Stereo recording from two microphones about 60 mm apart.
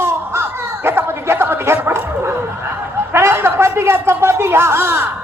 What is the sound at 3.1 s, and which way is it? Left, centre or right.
A man's voice, right.